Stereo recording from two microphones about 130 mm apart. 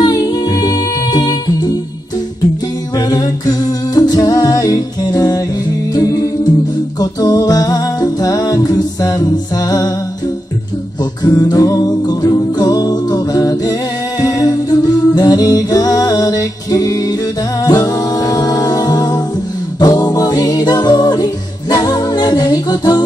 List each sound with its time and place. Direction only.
0.0 s music: 30° left (ahead or behind)
3.0 s humming: 30° left (ahead or behind)
5.9 s music: 30° left (ahead or behind)
11.2 s music: 30° left (ahead or behind)
14.2 s humming: 30° left (ahead or behind)
17.6 s music: 30° left (ahead or behind)